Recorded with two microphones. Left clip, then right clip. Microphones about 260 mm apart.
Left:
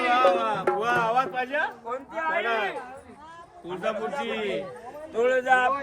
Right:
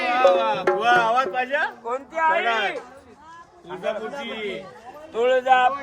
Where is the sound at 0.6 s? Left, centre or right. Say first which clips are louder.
Right 7 dB; right.